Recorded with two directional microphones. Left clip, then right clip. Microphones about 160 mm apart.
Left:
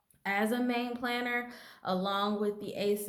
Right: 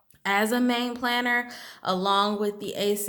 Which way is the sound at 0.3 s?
35° right (ahead or behind).